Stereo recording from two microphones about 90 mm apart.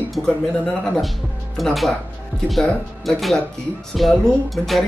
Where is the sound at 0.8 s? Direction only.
10° left (ahead or behind).